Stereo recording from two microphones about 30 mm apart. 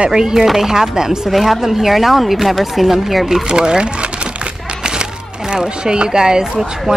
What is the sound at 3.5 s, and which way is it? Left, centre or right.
Speech, right.